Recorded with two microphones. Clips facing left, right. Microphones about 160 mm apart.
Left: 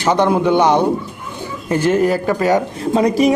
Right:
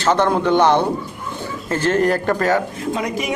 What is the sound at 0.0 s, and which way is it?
A man's voice, 10° left (ahead or behind).